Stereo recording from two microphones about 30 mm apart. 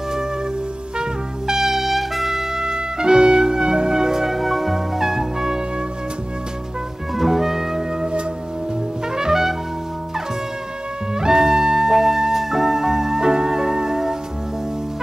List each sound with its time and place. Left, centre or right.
1.5 s trumpet: centre
3.1 s music: right
7.2 s music: centre
8.0 s music: right
9.1 s brass instrument: right
11.1 s music: centre